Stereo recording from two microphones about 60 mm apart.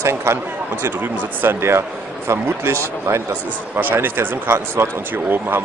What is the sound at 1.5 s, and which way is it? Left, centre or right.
Speech, right.